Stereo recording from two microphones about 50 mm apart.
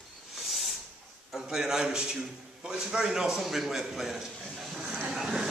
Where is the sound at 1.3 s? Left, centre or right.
Centre.